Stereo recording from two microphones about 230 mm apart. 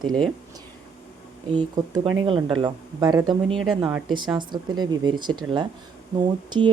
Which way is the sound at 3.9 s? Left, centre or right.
Centre.